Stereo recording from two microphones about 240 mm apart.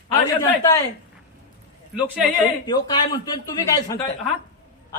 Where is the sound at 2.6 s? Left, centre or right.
Centre.